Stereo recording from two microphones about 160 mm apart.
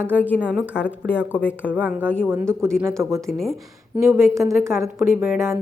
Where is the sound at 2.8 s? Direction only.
15° right (ahead or behind).